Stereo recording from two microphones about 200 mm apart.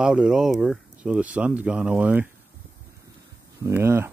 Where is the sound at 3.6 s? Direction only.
10° right (ahead or behind).